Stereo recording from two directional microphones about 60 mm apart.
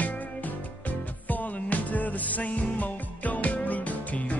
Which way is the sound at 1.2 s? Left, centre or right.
Left.